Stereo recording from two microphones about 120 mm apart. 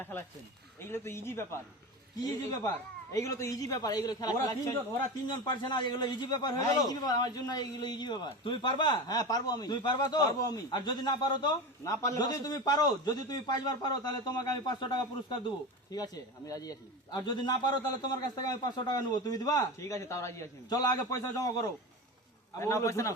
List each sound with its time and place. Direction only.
0.0 s a man's voice: 15° left (ahead or behind)